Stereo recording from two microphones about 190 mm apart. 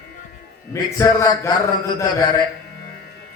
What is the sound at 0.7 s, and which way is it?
Speech, 15° left (ahead or behind).